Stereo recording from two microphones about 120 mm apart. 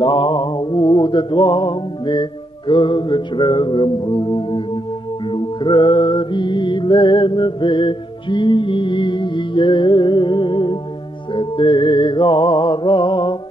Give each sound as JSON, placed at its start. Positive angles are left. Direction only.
{"t": 0.0, "sound": "music", "side_deg": 40}
{"t": 5.3, "sound": "mantra", "side_deg": 40}